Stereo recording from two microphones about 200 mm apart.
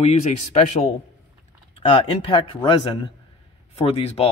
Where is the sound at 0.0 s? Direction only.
35° left (ahead or behind).